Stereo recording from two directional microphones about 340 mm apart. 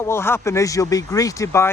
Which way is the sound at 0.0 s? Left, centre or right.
Centre.